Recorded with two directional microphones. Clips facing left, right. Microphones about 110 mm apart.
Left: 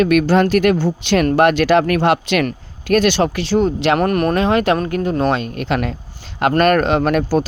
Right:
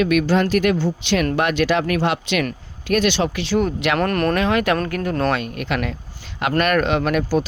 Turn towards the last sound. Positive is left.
turn(degrees=40)  # may be behind; listen again after turning